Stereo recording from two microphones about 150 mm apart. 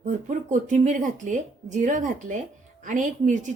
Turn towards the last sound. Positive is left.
turn(degrees=-60)  # may be behind; listen again after turning